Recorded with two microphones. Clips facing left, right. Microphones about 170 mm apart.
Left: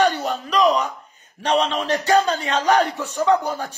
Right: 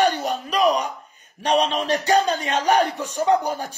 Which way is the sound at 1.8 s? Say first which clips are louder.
Left 1 dB; 15° right (ahead or behind).